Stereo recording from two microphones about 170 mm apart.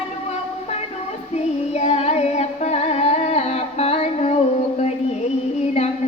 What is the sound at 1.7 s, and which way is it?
Music, 40° left (ahead or behind).